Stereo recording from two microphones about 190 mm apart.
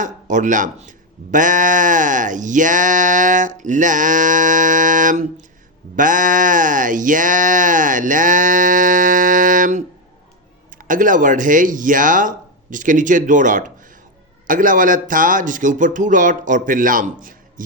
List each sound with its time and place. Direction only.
0.0 s speech: 40° right (ahead or behind)